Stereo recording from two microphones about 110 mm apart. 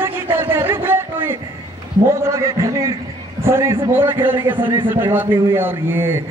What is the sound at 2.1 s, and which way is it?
A man's voice, 25° right (ahead or behind).